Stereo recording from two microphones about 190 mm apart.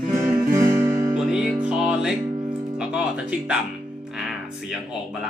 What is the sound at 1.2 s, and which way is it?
Music, centre (ahead or behind).